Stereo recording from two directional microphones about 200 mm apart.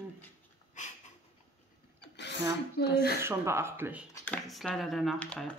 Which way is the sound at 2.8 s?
55° left (ahead or behind).